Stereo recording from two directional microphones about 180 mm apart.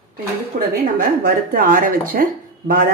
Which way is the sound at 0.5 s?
50° right (ahead or behind).